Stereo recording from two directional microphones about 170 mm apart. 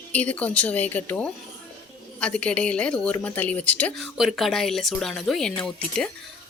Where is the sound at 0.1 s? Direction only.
10° left (ahead or behind).